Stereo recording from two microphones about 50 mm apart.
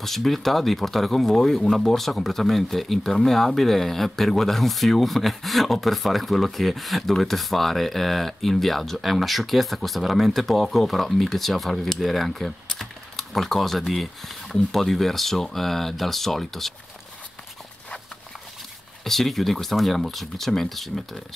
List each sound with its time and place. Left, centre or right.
0.0 s speech: centre
19.0 s speech: centre